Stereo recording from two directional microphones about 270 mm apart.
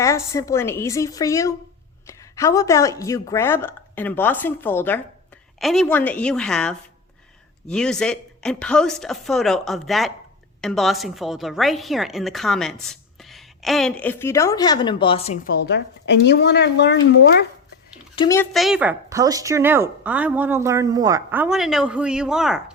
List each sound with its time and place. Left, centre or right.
0.0 s a woman's voice: centre
15.6 s speech: left
18.1 s a child's voice: centre
18.5 s a woman's voice: centre